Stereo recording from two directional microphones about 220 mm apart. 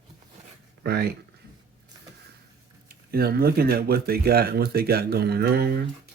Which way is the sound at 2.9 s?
45° right (ahead or behind).